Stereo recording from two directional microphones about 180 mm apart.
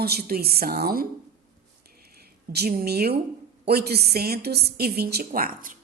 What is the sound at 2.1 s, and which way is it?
A woman's voice, 60° right (ahead or behind).